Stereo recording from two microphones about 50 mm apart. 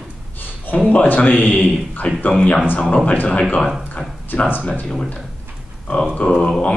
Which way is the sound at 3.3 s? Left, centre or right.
Left.